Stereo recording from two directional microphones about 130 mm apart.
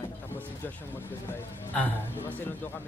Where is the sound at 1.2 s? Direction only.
15° left (ahead or behind).